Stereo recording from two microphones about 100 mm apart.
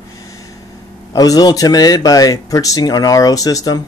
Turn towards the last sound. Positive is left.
turn(degrees=40)  # may be behind; listen again after turning